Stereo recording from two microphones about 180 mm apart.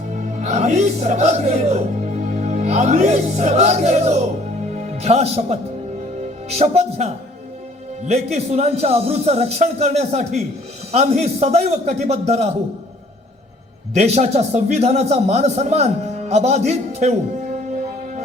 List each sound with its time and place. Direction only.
0.1 s a man's voice: 40° right (ahead or behind)
13.9 s a man's voice: 35° right (ahead or behind)